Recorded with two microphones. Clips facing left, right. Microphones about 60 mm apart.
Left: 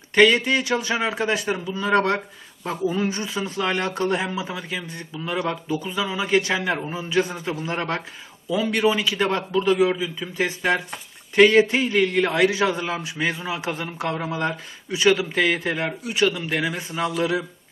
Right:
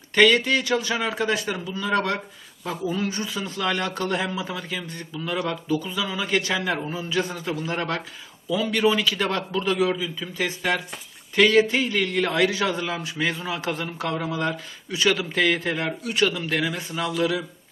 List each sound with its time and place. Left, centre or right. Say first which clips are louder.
0.1 s speech: left 1 dB; centre
1.5 s speech: left 2 dB; centre
1.8 s speech: left 4 dB; left